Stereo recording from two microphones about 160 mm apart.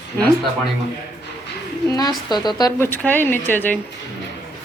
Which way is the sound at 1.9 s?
25° left (ahead or behind).